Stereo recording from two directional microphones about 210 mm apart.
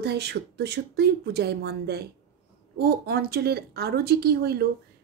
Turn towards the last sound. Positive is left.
turn(degrees=-50)  # may be behind; listen again after turning